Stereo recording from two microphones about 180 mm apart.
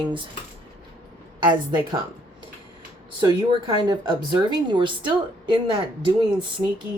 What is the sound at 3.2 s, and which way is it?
Speech, 25° right (ahead or behind).